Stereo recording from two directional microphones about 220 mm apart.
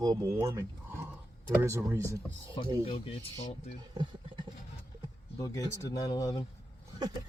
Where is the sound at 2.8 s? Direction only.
25° left (ahead or behind).